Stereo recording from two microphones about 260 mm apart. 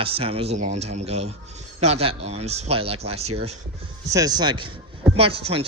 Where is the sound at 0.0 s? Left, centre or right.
Right.